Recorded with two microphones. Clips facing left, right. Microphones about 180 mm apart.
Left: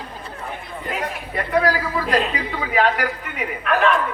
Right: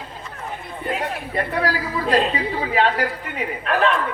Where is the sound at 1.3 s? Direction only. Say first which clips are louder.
Left 4 dB; 30° right (ahead or behind).